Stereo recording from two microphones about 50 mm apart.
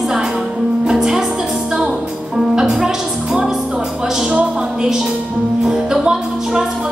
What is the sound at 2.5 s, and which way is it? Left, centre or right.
Speech, centre.